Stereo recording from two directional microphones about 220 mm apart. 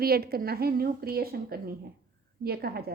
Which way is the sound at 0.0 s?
45° right (ahead or behind).